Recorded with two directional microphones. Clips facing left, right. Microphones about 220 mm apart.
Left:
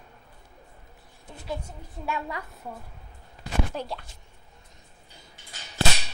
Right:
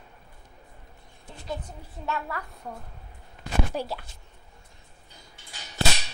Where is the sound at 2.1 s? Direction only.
15° left (ahead or behind).